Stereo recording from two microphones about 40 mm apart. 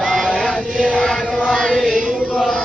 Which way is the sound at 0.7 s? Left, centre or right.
Centre.